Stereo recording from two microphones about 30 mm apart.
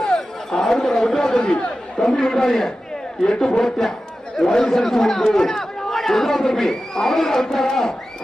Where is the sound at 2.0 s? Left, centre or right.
Left.